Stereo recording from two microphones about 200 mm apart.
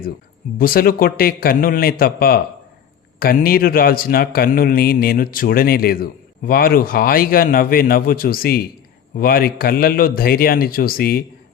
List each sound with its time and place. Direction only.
0.6 s a man's voice: 45° left (ahead or behind)